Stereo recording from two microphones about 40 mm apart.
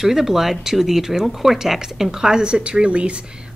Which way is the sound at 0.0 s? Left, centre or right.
Centre.